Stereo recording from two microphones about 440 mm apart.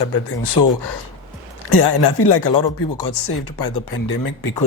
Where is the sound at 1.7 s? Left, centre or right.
Left.